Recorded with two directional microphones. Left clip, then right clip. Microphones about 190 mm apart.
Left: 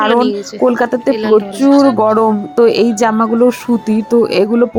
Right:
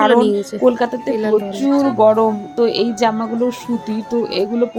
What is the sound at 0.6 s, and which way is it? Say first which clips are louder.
Speech: left 4 dB; 30° left (ahead or behind).